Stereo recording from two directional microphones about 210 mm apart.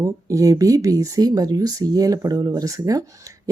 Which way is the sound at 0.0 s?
15° right (ahead or behind).